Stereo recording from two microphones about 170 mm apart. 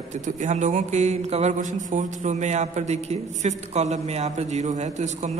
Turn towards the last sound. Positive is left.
turn(degrees=-40)  # may be behind; listen again after turning